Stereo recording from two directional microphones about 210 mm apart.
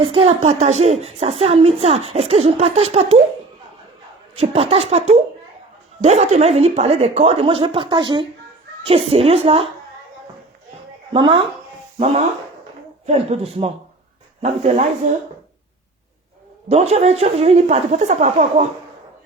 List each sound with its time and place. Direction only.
0.0 s a woman's voice: 25° right (ahead or behind)
4.4 s a woman's voice: 30° right (ahead or behind)
11.1 s a woman's voice: 25° right (ahead or behind)
13.1 s a woman's voice: 30° right (ahead or behind)
16.6 s speech: 30° right (ahead or behind)